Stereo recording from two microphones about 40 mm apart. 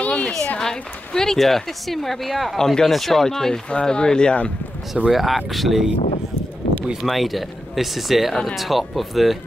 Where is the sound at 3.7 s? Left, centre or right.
Left.